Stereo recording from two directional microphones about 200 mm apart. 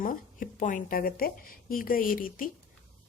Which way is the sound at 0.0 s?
40° left (ahead or behind).